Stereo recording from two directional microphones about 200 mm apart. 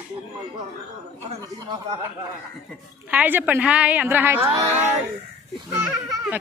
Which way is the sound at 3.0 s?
10° right (ahead or behind).